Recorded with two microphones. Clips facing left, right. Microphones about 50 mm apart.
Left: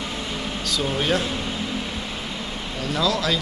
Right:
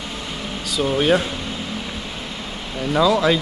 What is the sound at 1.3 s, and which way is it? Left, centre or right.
Air conditioning, centre.